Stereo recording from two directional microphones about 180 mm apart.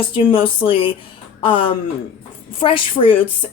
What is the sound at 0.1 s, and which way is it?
A woman's voice, 30° left (ahead or behind).